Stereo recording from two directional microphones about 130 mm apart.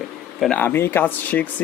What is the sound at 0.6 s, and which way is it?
Speech, 15° left (ahead or behind).